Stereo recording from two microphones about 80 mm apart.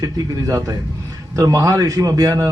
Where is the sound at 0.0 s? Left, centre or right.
Right.